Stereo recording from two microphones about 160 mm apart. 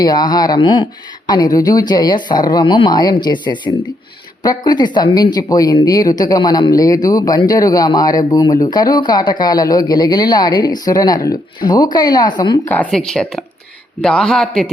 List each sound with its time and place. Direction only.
0.0 s speech: 25° left (ahead or behind)
12.6 s speech: 10° left (ahead or behind)